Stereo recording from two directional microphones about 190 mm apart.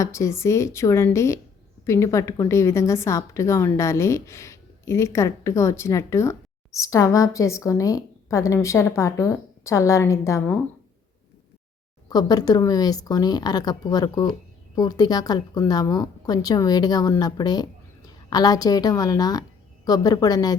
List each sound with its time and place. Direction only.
0.0 s a woman's voice: 15° left (ahead or behind)
12.0 s a woman's voice: 20° left (ahead or behind)